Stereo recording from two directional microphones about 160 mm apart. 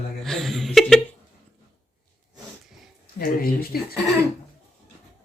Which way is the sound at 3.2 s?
70° left (ahead or behind).